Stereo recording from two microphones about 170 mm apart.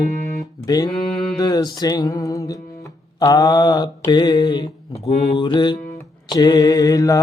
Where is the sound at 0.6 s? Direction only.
20° left (ahead or behind).